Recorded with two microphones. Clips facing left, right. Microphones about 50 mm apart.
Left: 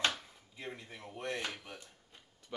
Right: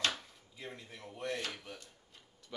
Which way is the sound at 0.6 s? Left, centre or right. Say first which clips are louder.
Left 2 dB; left.